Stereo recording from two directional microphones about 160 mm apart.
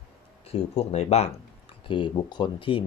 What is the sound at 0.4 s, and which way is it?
Speech, 40° left (ahead or behind).